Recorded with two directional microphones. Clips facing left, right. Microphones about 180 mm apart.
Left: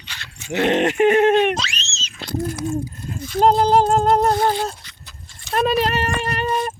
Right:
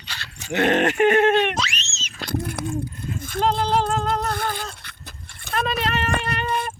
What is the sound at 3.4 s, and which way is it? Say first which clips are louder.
Music: left 6 dB; 45° left (ahead or behind).